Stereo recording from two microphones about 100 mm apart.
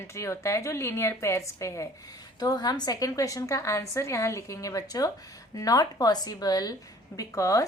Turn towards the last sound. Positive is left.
turn(degrees=35)  # may be behind; listen again after turning